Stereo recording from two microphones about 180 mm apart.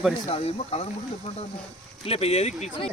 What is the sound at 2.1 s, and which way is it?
Speech, 35° left (ahead or behind).